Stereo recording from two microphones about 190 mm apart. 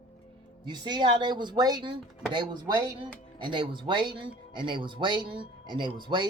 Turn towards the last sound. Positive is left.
turn(degrees=-25)  # may be behind; listen again after turning